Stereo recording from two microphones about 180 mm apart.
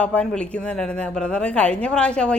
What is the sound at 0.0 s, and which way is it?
Speech, 5° left (ahead or behind).